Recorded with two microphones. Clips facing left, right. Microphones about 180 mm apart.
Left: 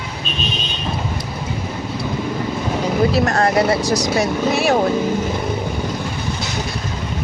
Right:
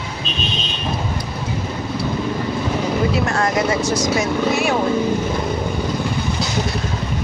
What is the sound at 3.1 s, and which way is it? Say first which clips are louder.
Vehicle: left 3 dB; 40° left (ahead or behind).